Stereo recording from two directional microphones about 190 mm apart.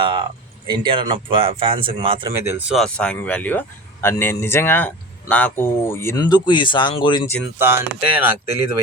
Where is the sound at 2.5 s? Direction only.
Centre (ahead or behind); by 7.2 s 25° left (ahead or behind).